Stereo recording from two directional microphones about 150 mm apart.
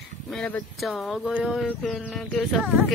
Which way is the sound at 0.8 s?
Centre (ahead or behind).